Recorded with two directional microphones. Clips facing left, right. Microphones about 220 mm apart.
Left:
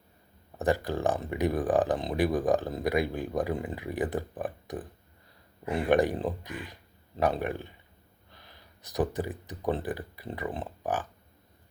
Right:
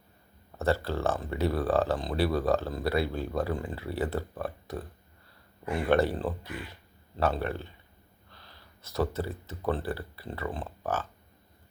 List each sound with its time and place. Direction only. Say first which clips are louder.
0.5 s speech: left 1 dB; 15° left (ahead or behind)